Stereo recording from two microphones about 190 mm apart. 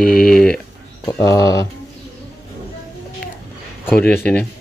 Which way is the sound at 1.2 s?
20° left (ahead or behind).